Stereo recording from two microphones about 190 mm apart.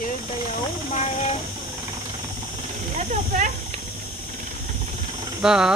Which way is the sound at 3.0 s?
40° right (ahead or behind).